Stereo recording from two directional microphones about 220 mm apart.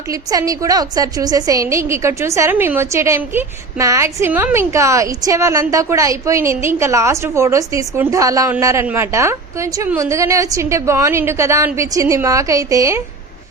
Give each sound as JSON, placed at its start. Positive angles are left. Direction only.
{"t": 0.1, "sound": "a woman's voice", "side_deg": -15}